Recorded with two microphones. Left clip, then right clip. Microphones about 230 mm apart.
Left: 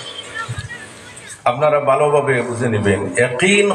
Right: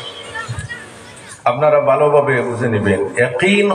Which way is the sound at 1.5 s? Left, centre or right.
Left.